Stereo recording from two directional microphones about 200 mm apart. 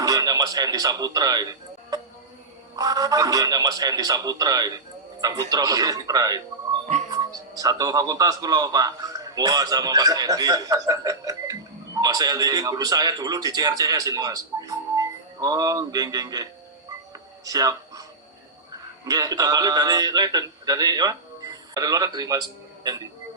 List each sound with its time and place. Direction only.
0.0 s speech: 20° right (ahead or behind)
2.7 s a man's voice: 15° right (ahead or behind)
17.1 s a sound: 20° right (ahead or behind)
19.0 s a man's voice: 15° right (ahead or behind)